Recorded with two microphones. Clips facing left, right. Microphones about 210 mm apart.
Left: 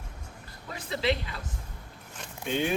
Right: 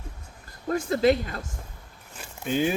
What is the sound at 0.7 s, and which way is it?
Speech, 45° right (ahead or behind).